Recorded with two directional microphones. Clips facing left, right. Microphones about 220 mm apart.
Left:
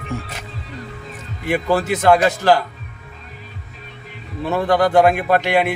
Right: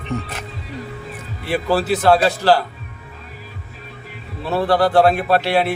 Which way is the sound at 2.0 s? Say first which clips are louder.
Left 1 dB; 15° left (ahead or behind).